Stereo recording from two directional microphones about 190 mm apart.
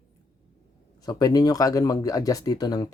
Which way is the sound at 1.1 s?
20° left (ahead or behind).